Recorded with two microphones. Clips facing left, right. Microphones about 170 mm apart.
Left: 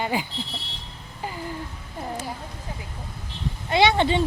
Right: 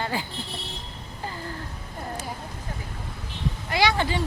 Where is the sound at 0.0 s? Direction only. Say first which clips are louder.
Left 3 dB; 15° left (ahead or behind).